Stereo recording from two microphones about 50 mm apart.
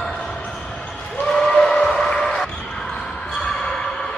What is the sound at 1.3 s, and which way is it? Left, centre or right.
Steam whistle, centre.